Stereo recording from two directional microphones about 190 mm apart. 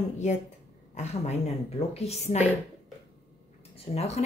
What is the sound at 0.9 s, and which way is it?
Speech, 35° left (ahead or behind).